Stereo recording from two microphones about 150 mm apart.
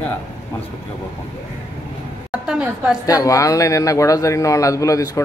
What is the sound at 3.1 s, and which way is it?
A man's voice, 25° left (ahead or behind).